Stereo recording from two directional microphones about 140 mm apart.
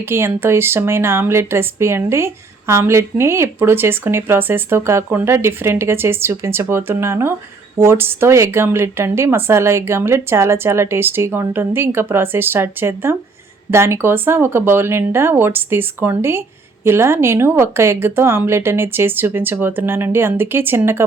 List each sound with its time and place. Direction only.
0.0 s a woman's voice: 15° right (ahead or behind)